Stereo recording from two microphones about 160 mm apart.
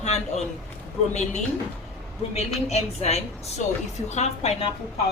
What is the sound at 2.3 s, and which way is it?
A woman's voice, 40° left (ahead or behind).